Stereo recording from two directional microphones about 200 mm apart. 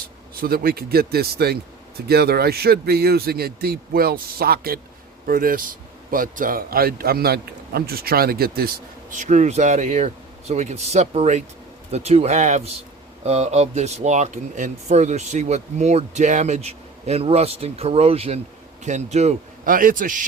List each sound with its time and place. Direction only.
0.3 s a man's voice: 50° right (ahead or behind)